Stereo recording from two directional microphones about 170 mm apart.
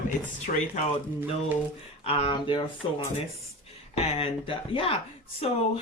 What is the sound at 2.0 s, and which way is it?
Speech, 35° left (ahead or behind).